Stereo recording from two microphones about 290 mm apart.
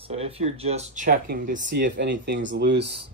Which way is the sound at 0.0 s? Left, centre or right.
Centre.